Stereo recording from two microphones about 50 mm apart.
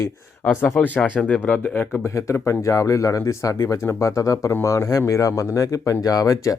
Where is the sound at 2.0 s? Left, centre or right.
Left.